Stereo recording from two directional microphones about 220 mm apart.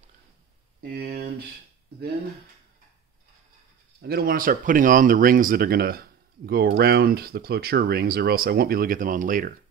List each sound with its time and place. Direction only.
0.8 s speech: 45° right (ahead or behind)
4.0 s speech: 45° right (ahead or behind)